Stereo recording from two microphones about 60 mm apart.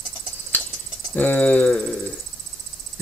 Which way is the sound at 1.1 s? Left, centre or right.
Left.